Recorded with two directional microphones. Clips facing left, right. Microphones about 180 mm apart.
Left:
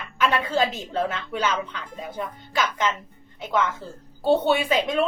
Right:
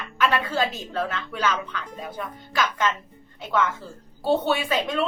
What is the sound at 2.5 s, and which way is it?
Speech, 15° left (ahead or behind).